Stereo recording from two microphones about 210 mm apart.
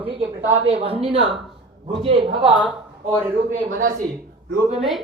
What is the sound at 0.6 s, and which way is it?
Speech, 25° right (ahead or behind).